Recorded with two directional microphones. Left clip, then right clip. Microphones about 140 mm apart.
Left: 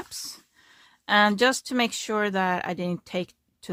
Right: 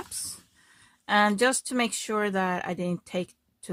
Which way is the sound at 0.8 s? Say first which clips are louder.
Left 2 dB; 30° left (ahead or behind).